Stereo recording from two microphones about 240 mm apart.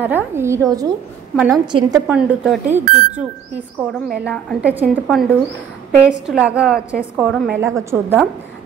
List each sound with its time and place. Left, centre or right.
0.0 s a woman's voice: centre
1.3 s a woman's voice: centre
1.7 s a woman's voice: centre
2.0 s a woman's voice: centre
3.8 s a woman's voice: centre